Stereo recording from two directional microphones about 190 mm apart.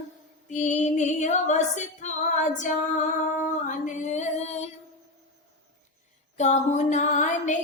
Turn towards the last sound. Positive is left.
turn(degrees=40)  # may be behind; listen again after turning